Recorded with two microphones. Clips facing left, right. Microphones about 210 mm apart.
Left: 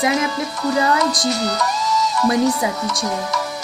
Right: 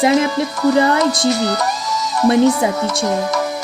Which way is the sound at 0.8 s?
30° right (ahead or behind).